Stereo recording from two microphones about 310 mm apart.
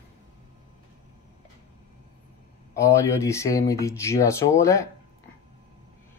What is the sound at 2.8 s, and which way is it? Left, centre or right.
Speech, centre.